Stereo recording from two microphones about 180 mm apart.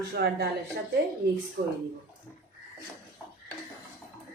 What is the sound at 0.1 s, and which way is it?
Speech, 65° right (ahead or behind).